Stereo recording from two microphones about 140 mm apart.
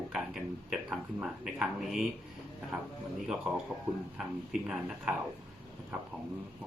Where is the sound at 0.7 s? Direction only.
5° right (ahead or behind).